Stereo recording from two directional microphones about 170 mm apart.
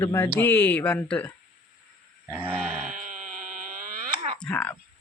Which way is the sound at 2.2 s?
10° right (ahead or behind).